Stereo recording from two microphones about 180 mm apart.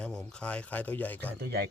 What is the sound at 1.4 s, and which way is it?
Speech, 65° right (ahead or behind).